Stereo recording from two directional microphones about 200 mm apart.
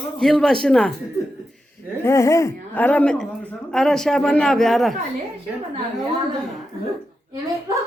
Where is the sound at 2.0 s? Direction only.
15° left (ahead or behind).